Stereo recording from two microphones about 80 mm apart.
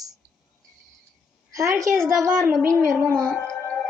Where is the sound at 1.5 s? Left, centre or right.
Right.